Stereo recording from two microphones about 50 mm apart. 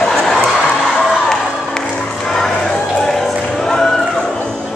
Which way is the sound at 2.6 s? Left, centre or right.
Centre.